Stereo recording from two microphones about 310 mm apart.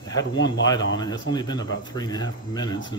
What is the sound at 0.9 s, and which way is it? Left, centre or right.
Speech, centre.